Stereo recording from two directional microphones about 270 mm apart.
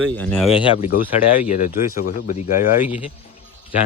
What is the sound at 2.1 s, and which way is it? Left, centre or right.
Speech, left.